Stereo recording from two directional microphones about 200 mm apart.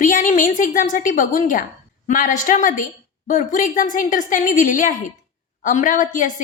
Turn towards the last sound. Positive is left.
turn(degrees=40)  # may be behind; listen again after turning